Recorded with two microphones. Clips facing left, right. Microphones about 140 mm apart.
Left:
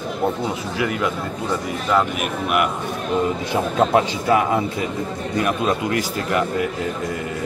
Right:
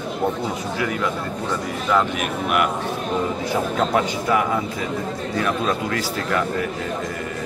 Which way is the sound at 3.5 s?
25° left (ahead or behind).